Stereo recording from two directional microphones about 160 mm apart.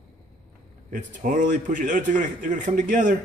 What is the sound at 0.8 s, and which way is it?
A man's voice, 55° right (ahead or behind).